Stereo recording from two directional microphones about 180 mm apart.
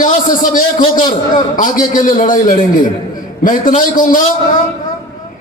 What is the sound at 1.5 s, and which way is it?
A man's voice, 45° left (ahead or behind).